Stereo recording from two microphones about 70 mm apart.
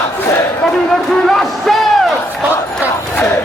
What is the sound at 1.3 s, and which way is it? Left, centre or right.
Music, centre.